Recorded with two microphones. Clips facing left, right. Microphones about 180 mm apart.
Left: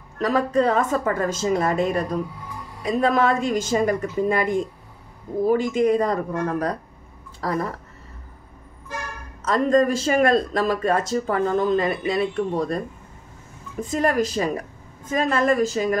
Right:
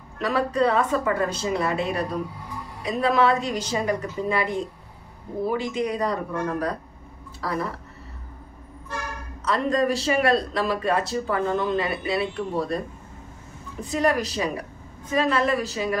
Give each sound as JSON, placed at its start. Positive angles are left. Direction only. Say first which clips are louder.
{"t": 0.2, "sound": "a man's voice", "louder": "left 2 dB", "side_deg": 45}
{"t": 9.4, "sound": "a man's voice", "louder": "left 4 dB", "side_deg": 45}